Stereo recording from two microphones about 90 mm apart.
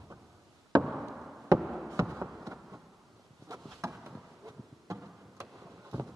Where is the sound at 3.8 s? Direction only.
35° right (ahead or behind).